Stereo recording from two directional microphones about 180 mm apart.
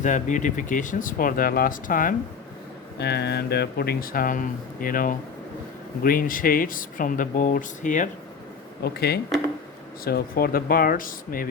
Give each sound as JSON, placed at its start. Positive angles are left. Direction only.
{"t": 0.0, "sound": "speech", "side_deg": 45}
{"t": 3.0, "sound": "speech", "side_deg": 65}
{"t": 8.8, "sound": "speech", "side_deg": 60}